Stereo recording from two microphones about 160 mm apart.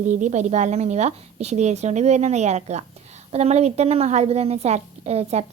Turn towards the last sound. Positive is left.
turn(degrees=-40)  # may be behind; listen again after turning